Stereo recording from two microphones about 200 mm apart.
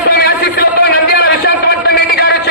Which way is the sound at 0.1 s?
50° left (ahead or behind).